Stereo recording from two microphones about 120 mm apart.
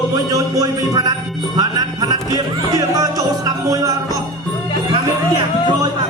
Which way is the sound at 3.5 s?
30° right (ahead or behind).